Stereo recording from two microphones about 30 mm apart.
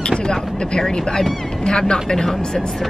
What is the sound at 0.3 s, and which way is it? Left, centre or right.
Speech, left.